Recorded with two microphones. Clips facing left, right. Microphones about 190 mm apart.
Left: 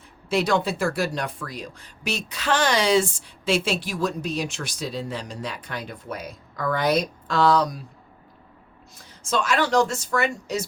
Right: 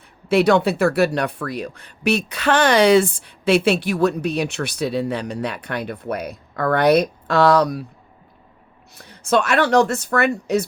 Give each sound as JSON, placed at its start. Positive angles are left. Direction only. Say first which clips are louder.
{"t": 0.3, "sound": "speech", "louder": "right 7 dB", "side_deg": -65}
{"t": 9.0, "sound": "speech", "louder": "right 7 dB", "side_deg": -65}